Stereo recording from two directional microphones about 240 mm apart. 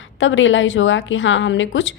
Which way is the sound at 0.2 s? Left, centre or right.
Left.